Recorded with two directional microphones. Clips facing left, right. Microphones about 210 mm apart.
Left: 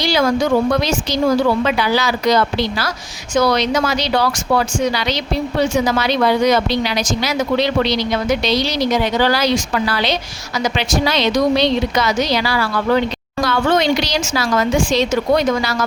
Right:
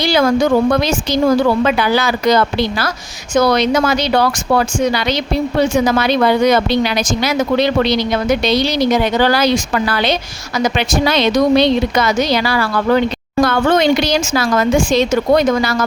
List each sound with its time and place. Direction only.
0.0 s a woman's voice: 55° right (ahead or behind)